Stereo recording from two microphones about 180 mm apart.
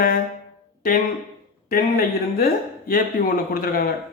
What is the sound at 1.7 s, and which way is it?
Speech, 55° left (ahead or behind).